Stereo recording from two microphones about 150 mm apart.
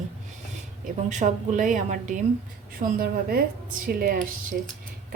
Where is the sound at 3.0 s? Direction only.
80° right.